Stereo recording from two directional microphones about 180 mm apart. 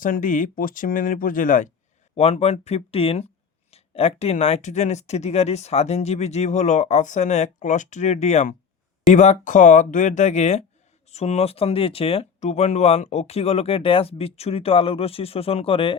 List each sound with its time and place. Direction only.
0.0 s speech: 45° left (ahead or behind)
2.1 s speech: 35° left (ahead or behind)